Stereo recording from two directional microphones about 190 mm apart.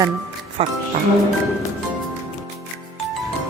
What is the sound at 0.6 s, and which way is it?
Speech, 30° right (ahead or behind).